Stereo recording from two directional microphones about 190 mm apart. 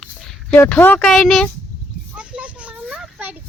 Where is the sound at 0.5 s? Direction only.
10° left (ahead or behind).